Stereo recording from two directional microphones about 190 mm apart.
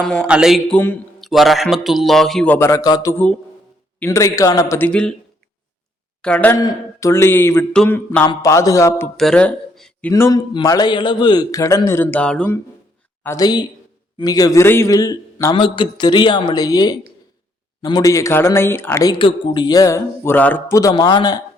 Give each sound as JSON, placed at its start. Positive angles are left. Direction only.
{"t": 0.3, "sound": "a man's voice", "side_deg": -5}
{"t": 0.8, "sound": "a sound", "side_deg": 10}
{"t": 1.3, "sound": "a man's voice", "side_deg": 0}
{"t": 6.2, "sound": "speech", "side_deg": 10}
{"t": 9.1, "sound": "speech", "side_deg": 5}
{"t": 10.1, "sound": "a man's voice", "side_deg": 15}
{"t": 13.2, "sound": "a man's voice", "side_deg": 20}